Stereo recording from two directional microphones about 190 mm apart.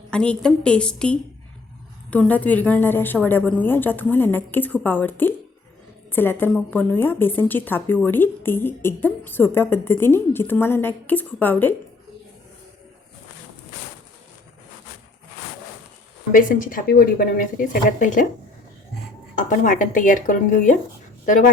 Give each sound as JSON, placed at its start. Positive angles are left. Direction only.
{"t": 0.1, "sound": "a woman's voice", "side_deg": 5}
{"t": 16.3, "sound": "a woman's voice", "side_deg": 45}
{"t": 19.4, "sound": "a woman's voice", "side_deg": 45}